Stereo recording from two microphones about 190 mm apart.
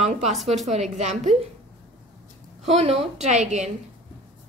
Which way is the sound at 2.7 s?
30° right (ahead or behind).